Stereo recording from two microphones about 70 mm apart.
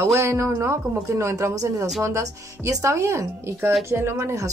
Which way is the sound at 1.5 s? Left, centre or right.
Right.